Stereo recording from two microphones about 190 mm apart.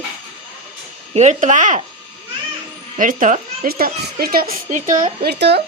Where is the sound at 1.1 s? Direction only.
35° right (ahead or behind).